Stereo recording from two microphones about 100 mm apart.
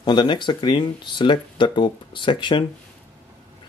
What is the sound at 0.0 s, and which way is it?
Speech, 45° left (ahead or behind).